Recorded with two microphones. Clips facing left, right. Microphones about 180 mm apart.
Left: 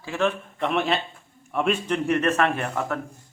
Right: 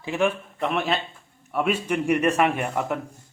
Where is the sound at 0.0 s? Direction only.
15° right (ahead or behind).